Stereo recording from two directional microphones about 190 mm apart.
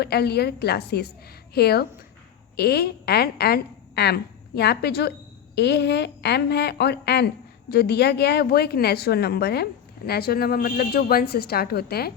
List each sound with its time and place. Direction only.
0.0 s a woman's voice: 55° left (ahead or behind)